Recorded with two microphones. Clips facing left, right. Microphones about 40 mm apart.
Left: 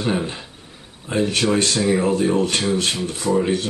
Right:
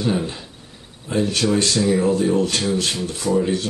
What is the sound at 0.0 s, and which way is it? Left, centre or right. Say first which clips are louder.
Speech: even; left.